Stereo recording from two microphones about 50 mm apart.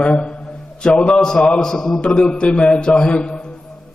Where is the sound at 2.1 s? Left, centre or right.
Left.